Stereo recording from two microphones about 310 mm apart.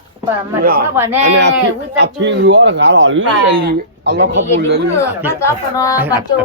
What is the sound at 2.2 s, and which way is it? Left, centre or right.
A man's voice, right.